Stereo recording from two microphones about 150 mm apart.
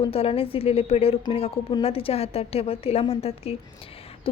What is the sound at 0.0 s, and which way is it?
A woman's voice, 40° left (ahead or behind).